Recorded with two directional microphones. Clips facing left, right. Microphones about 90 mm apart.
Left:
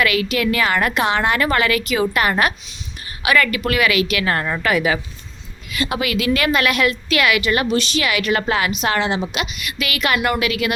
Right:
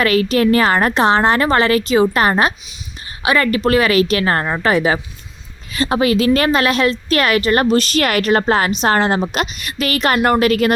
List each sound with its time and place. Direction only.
0.0 s a woman's voice: 35° right (ahead or behind)